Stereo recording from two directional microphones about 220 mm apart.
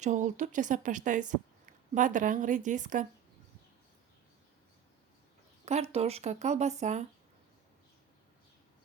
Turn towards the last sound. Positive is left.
turn(degrees=-30)  # may be behind; listen again after turning